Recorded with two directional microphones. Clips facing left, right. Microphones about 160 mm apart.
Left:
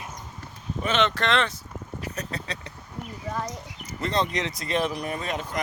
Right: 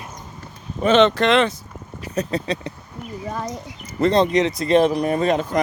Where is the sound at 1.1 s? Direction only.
15° right (ahead or behind).